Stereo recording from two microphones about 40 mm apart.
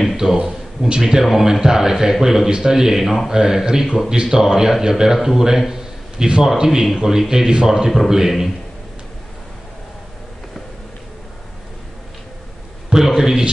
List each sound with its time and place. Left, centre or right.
0.2 s a man's voice: centre
5.7 s a sound: centre
6.4 s a man's voice: centre
12.9 s a man's voice: centre